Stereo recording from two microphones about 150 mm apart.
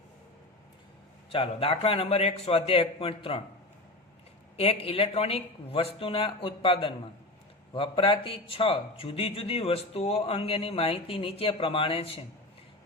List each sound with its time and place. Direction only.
1.3 s a man's voice: 40° left (ahead or behind)
4.5 s a man's voice: 40° left (ahead or behind)